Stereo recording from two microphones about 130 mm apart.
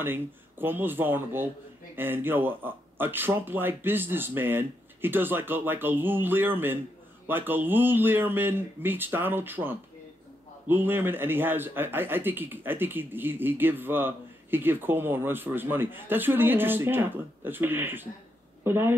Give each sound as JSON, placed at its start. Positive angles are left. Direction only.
{"t": 0.0, "sound": "a man's voice", "side_deg": -15}